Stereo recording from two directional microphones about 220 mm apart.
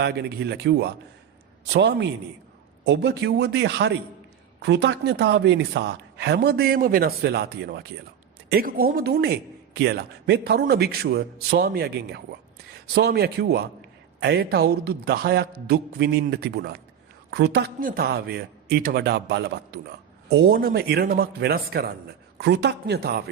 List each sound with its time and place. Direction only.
0.0 s speech: 45° right (ahead or behind)